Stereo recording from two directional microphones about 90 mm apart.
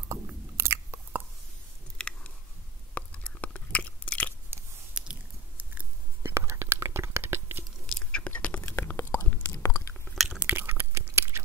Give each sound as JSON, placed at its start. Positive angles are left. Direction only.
{"t": 0.6, "sound": "biting", "side_deg": -30}
{"t": 2.0, "sound": "chewing", "side_deg": 10}
{"t": 2.9, "sound": "biting", "side_deg": 15}
{"t": 5.0, "sound": "chewing", "side_deg": -10}
{"t": 6.2, "sound": "whispering", "side_deg": -30}
{"t": 7.8, "sound": "whispering", "side_deg": 15}
{"t": 8.6, "sound": "whispering", "side_deg": 25}
{"t": 9.5, "sound": "chewing", "side_deg": 40}
{"t": 10.1, "sound": "a sound", "side_deg": 0}
{"t": 10.4, "sound": "chewing", "side_deg": -20}